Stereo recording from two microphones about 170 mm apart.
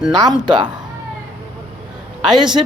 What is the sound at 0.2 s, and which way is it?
Speech, 25° right (ahead or behind).